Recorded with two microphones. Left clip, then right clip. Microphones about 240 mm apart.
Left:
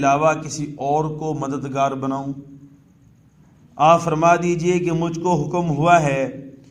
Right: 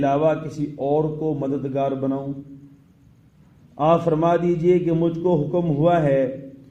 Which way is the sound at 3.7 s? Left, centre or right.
Left.